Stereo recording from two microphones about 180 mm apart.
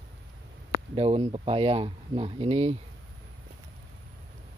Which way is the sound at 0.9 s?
30° right (ahead or behind).